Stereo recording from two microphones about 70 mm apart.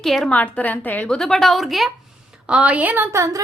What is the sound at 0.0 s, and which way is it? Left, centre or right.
Speech, centre.